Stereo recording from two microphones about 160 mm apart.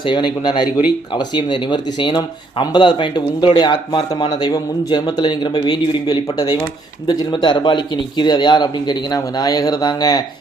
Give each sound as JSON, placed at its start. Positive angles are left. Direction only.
{"t": 0.0, "sound": "speech", "side_deg": 30}